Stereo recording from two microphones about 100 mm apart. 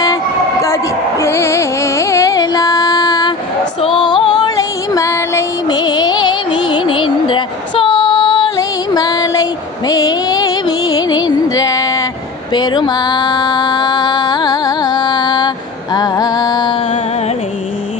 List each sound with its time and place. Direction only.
1.2 s carnatic music: 30° left (ahead or behind)
3.9 s music: 50° left (ahead or behind); by 5.5 s 30° left (ahead or behind)
5.6 s music: 45° left (ahead or behind)
8.5 s a sound: 40° left (ahead or behind)
12.5 s music: 50° left (ahead or behind)